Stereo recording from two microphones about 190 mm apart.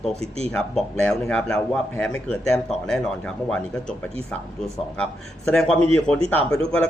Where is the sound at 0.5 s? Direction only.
5° left (ahead or behind).